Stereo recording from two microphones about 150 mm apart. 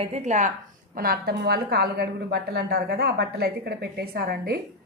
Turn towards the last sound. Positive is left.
turn(degrees=-90)